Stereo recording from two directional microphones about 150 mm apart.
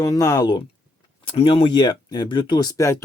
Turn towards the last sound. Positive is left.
turn(degrees=20)  # may be behind; listen again after turning